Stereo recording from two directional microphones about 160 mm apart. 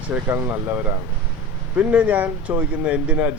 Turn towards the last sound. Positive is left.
turn(degrees=-10)  # may be behind; listen again after turning